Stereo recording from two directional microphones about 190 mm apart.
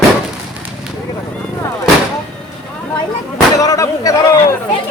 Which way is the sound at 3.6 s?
20° left (ahead or behind).